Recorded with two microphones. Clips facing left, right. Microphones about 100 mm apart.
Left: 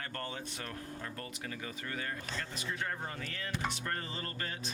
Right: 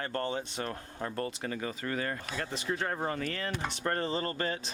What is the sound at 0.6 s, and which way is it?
Speech, 35° right (ahead or behind).